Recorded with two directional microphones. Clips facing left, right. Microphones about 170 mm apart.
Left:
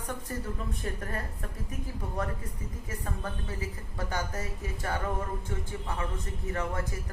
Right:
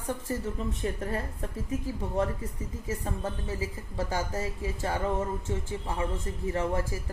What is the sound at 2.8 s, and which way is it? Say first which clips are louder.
Speech: right 5 dB; 25° right (ahead or behind).